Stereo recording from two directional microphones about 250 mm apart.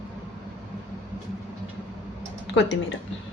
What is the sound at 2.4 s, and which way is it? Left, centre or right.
Speech, left.